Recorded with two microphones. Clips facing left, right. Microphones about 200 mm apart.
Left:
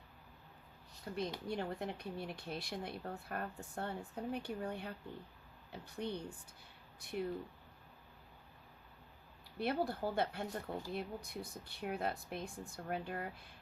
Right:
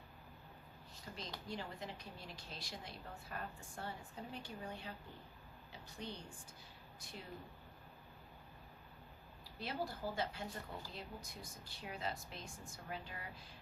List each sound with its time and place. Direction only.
1.1 s a woman's voice: 50° left (ahead or behind)
9.6 s a woman's voice: 60° left (ahead or behind)